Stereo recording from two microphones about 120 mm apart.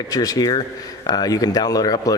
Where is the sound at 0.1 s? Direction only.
30° left (ahead or behind).